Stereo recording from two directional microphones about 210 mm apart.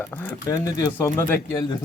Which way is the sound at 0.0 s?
10° left (ahead or behind).